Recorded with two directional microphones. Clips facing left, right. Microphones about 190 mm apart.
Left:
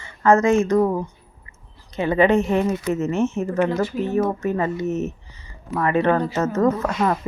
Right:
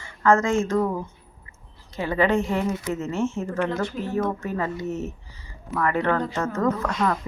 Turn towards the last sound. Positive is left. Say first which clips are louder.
# left 4 dB
turn(degrees=20)  # may be behind; listen again after turning